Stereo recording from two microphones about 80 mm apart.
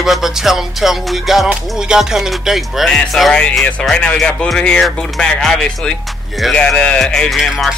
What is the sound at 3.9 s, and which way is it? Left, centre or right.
Speech, centre.